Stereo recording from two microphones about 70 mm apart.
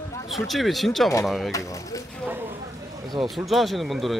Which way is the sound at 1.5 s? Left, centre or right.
Left.